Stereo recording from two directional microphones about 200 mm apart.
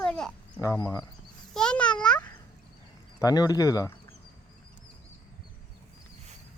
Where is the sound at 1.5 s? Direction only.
5° left (ahead or behind).